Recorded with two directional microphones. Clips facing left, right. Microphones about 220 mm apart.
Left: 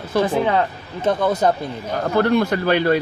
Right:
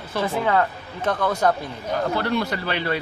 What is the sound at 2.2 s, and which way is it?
Speech, 50° left (ahead or behind).